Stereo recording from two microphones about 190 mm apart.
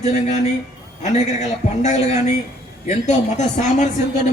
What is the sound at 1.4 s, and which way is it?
A man's voice, 35° left (ahead or behind).